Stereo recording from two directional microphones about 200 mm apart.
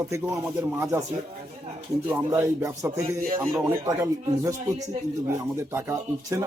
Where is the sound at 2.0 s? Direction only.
15° right (ahead or behind).